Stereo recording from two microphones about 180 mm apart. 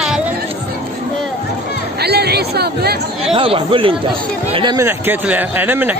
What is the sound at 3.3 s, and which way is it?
Speech, 30° right (ahead or behind).